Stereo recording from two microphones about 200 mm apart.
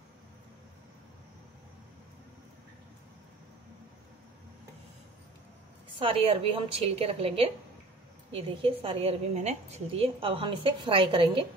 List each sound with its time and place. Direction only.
5.9 s a woman's voice: 30° right (ahead or behind)